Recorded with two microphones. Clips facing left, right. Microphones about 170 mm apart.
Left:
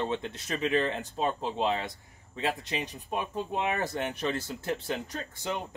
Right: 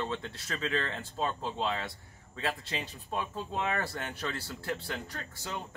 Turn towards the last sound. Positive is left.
turn(degrees=20)  # may be behind; listen again after turning